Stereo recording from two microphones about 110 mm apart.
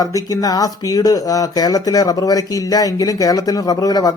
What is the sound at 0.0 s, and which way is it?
Speech, 35° left (ahead or behind).